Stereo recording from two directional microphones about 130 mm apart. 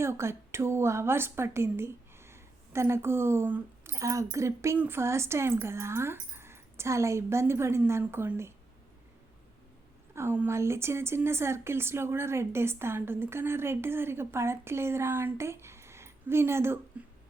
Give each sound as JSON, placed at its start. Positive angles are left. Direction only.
{"t": 0.0, "sound": "a woman's voice", "side_deg": -20}
{"t": 10.2, "sound": "speech", "side_deg": -15}